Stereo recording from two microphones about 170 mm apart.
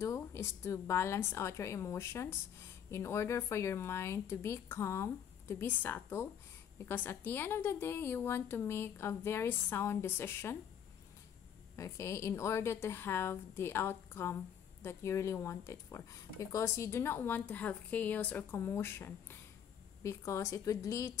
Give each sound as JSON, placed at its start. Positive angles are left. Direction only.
{"t": 0.0, "sound": "a woman's voice", "side_deg": 15}
{"t": 11.7, "sound": "a woman's voice", "side_deg": 15}